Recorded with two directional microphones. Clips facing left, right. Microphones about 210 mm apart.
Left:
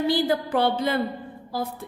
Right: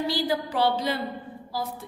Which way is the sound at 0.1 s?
55° left (ahead or behind).